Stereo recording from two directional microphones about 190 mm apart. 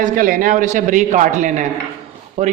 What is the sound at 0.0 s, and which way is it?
A man's voice, 45° right (ahead or behind).